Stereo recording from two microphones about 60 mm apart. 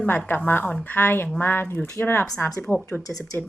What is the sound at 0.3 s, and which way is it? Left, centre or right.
A woman's voice, left.